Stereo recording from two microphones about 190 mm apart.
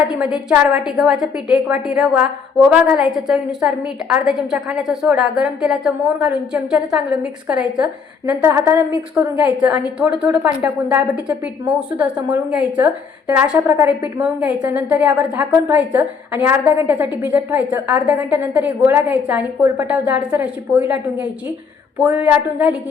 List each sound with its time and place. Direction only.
0.1 s a woman's voice: 5° right (ahead or behind)